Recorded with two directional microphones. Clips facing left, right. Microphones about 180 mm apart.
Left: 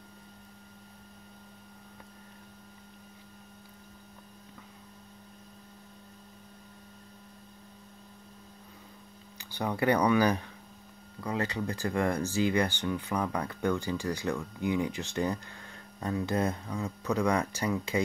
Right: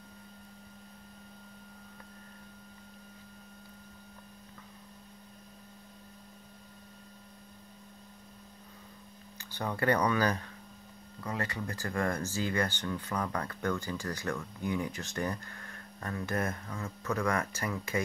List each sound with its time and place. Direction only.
9.5 s speech: 15° left (ahead or behind)